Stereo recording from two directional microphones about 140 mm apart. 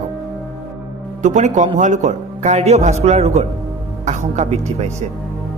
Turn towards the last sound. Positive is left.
turn(degrees=-55)  # may be behind; listen again after turning